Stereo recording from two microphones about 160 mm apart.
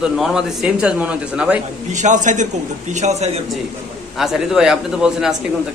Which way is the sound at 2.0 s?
50° right (ahead or behind).